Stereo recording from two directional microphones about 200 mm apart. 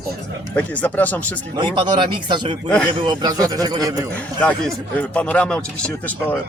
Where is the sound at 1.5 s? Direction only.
25° right (ahead or behind).